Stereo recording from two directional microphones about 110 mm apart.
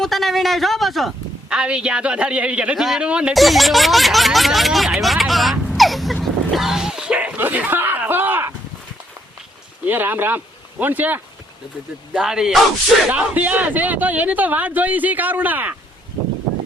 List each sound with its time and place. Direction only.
0.0 s a man's voice: centre (ahead or behind)
6.2 s a sound: centre (ahead or behind); by 8.5 s 20° right (ahead or behind)
9.8 s speech: 15° right (ahead or behind)
12.1 s a man's voice: 5° right (ahead or behind)